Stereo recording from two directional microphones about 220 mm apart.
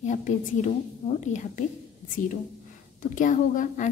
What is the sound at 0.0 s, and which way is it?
A woman's voice, 35° left (ahead or behind).